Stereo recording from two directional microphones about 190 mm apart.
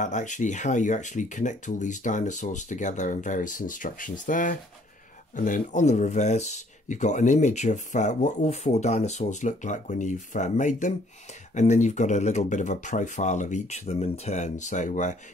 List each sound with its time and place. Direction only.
0.0 s speech: 40° left (ahead or behind)